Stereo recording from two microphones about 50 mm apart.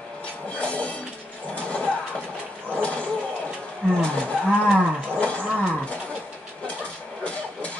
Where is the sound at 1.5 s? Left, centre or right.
Left.